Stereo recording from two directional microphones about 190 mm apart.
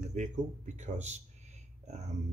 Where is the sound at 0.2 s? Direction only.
40° right (ahead or behind).